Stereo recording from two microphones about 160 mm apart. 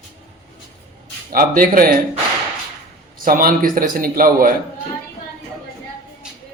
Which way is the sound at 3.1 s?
60° right (ahead or behind).